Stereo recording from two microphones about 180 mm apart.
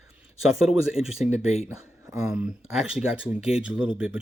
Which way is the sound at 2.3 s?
5° right (ahead or behind).